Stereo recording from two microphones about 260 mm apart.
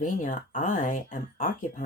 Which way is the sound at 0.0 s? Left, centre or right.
Left.